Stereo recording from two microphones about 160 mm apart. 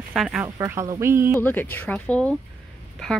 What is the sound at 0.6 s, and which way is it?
Speech, 20° right (ahead or behind).